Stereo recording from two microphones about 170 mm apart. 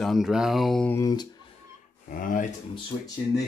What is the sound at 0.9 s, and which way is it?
Speech, 20° left (ahead or behind).